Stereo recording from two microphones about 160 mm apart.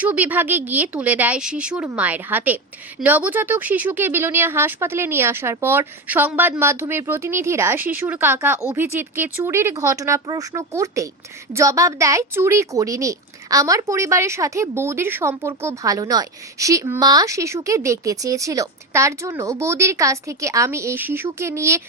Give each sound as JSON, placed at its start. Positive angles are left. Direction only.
{"t": 0.0, "sound": "speech", "side_deg": -10}